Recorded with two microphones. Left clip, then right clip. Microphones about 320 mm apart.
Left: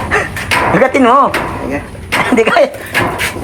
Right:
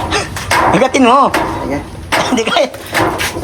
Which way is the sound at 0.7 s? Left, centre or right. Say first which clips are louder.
Left 2 dB; centre.